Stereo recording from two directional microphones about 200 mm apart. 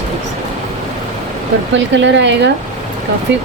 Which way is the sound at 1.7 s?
65° right (ahead or behind).